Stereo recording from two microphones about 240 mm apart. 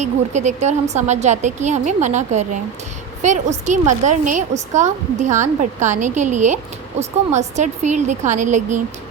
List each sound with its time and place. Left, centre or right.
0.0 s a woman's voice: right